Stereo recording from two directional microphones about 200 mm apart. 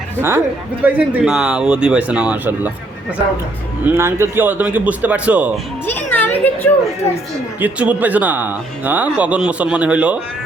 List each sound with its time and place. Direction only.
0.2 s speech: 10° right (ahead or behind)
3.8 s speech: 10° right (ahead or behind)
5.8 s children playing: 10° left (ahead or behind)
7.6 s speech: 10° right (ahead or behind)